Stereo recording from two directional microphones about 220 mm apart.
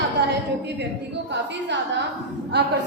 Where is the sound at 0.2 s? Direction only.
50° right (ahead or behind).